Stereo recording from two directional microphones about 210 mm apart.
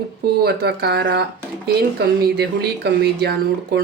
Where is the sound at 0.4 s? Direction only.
50° right (ahead or behind).